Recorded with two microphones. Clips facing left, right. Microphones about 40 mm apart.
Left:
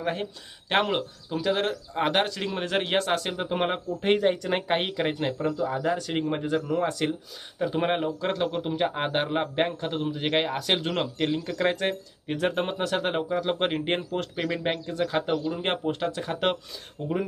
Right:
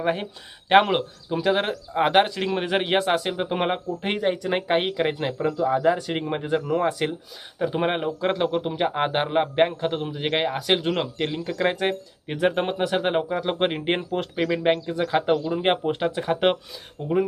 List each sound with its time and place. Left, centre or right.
0.0 s speech: right